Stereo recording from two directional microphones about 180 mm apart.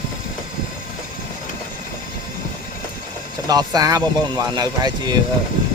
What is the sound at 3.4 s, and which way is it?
Speech, 20° right (ahead or behind).